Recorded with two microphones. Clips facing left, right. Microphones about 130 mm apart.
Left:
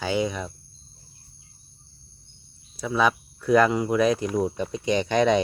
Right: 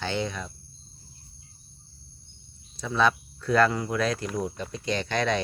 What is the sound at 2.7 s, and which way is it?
Speech, 10° left (ahead or behind).